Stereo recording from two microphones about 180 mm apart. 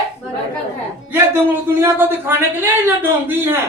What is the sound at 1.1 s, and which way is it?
A man's voice, 10° right (ahead or behind).